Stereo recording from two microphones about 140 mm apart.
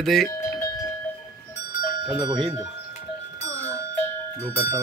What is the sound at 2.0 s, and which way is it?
Speech, 30° right (ahead or behind).